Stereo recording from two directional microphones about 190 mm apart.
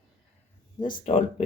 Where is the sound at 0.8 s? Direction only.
45° left (ahead or behind).